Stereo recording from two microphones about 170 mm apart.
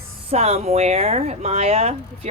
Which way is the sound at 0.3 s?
40° right (ahead or behind).